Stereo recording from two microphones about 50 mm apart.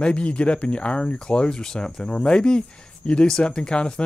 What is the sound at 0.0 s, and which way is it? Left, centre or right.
Speech, left.